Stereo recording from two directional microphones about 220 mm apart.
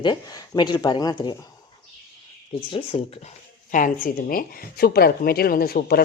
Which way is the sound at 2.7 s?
25° left (ahead or behind).